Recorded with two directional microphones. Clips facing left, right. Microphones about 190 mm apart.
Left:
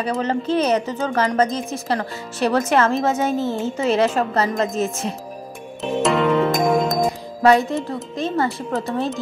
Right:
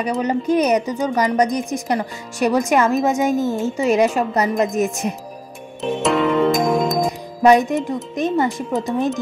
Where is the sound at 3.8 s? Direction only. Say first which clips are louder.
Right 2 dB; 10° right (ahead or behind).